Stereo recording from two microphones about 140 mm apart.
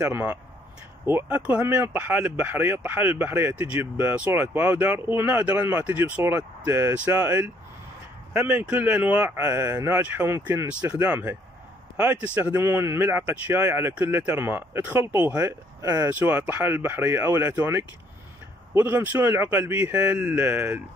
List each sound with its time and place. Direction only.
0.0 s speech: 15° right (ahead or behind)
15.8 s speech: 25° right (ahead or behind)
16.1 s speech: 10° right (ahead or behind)